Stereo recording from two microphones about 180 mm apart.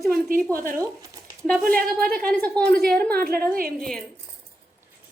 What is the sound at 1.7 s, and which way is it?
A woman's voice, 5° left (ahead or behind).